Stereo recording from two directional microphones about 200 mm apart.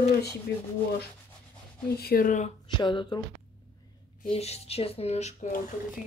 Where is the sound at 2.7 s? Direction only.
25° left (ahead or behind).